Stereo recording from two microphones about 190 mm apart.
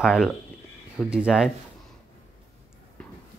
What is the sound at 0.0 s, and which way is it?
Speech, 5° right (ahead or behind).